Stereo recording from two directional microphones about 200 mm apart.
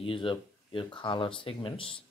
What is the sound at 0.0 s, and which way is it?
Speech, 25° left (ahead or behind).